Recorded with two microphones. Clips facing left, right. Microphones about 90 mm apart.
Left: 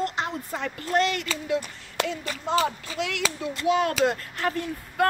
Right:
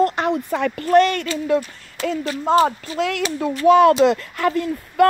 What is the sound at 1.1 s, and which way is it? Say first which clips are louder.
Speech: right 7 dB; 50° right (ahead or behind).